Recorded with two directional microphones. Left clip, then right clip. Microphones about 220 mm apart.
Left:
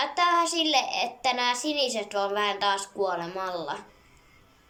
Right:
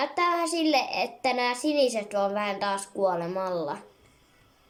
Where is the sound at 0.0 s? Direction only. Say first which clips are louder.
Left 2 dB; 20° right (ahead or behind).